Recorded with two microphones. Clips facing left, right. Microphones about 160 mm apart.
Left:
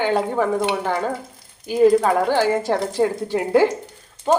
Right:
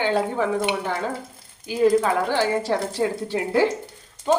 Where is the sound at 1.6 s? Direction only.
40° left (ahead or behind).